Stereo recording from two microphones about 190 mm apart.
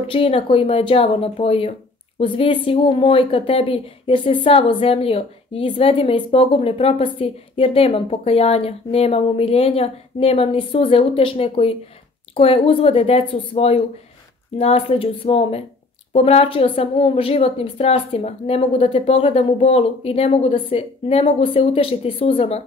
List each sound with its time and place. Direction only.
0.0 s a woman's voice: 30° left (ahead or behind)